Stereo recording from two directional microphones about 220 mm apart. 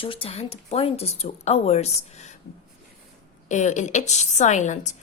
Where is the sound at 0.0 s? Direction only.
25° left (ahead or behind).